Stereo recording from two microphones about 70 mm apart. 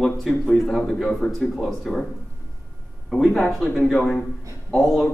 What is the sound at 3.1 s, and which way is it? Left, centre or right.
Speech, centre.